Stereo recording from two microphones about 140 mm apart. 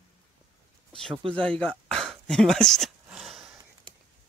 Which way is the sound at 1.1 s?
40° right (ahead or behind).